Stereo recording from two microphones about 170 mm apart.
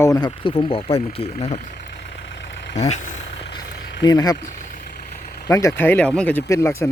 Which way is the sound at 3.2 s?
90° left.